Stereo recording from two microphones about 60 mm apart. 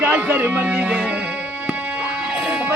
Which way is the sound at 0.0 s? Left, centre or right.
Right.